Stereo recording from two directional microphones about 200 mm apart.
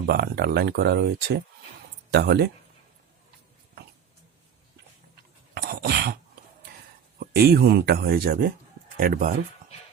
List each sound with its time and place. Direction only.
0.0 s speech: 50° right (ahead or behind)
5.5 s a sound: 50° right (ahead or behind)
7.2 s speech: 50° right (ahead or behind)